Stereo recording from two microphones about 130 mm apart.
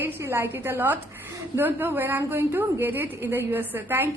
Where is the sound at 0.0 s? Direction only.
20° right (ahead or behind).